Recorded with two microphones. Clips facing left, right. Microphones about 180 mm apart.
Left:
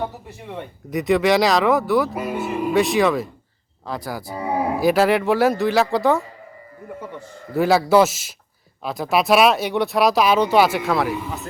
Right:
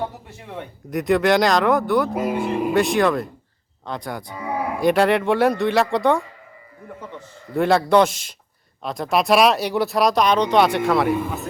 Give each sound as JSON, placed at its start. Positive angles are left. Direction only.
{"t": 0.3, "sound": "speech", "side_deg": 0}
{"t": 4.4, "sound": "cattle", "side_deg": 30}
{"t": 4.8, "sound": "speech", "side_deg": 5}
{"t": 7.5, "sound": "speech", "side_deg": 5}